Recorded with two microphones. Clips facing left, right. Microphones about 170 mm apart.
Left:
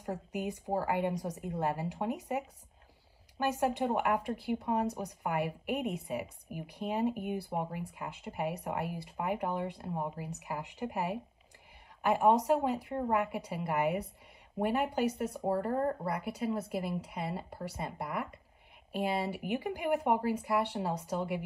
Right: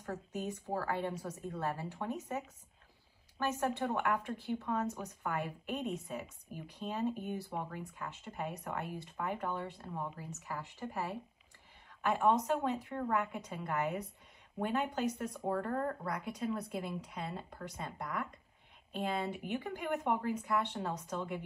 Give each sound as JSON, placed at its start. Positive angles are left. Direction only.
{"t": 0.0, "sound": "speech", "side_deg": 15}
{"t": 15.2, "sound": "speech", "side_deg": 30}
{"t": 15.6, "sound": "speech", "side_deg": 10}